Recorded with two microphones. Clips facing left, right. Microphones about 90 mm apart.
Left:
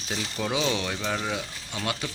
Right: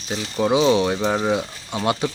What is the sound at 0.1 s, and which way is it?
Speech, 20° right (ahead or behind).